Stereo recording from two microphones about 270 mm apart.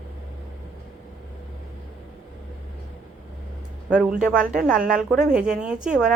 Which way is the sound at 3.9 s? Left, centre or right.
Centre.